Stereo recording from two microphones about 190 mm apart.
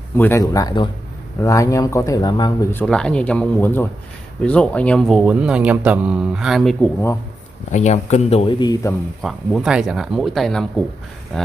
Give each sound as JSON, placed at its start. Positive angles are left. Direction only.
{"t": 0.2, "sound": "speech", "side_deg": 15}
{"t": 2.7, "sound": "speech", "side_deg": 5}
{"t": 7.7, "sound": "speech", "side_deg": 35}
{"t": 9.2, "sound": "speech", "side_deg": 0}